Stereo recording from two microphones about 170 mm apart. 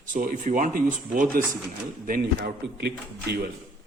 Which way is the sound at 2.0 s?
60° right (ahead or behind).